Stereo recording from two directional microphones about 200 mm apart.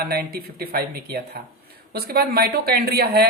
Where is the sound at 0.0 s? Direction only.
50° right (ahead or behind).